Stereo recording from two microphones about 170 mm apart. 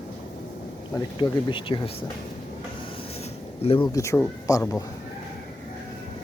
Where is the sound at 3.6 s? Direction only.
30° left (ahead or behind).